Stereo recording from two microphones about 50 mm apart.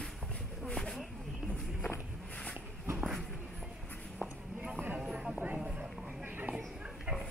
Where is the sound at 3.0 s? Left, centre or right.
Centre.